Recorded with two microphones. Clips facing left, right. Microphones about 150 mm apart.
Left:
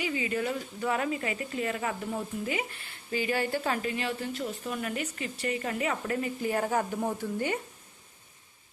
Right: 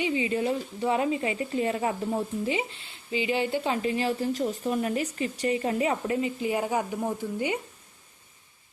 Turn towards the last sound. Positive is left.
turn(degrees=-15)  # may be behind; listen again after turning